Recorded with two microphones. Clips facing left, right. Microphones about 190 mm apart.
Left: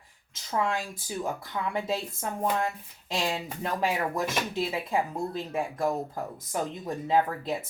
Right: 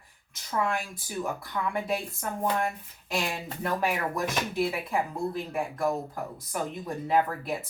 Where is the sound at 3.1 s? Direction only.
20° left (ahead or behind).